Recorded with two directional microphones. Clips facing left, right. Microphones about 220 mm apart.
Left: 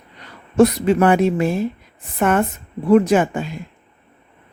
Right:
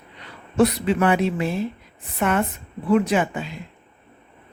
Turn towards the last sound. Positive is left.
turn(degrees=45)  # may be behind; listen again after turning